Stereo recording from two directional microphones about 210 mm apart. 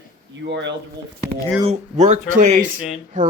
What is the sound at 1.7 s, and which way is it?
Speech, 35° right (ahead or behind).